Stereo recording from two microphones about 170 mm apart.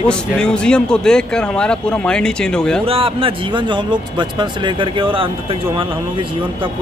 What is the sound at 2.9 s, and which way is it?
Speech, 35° right (ahead or behind).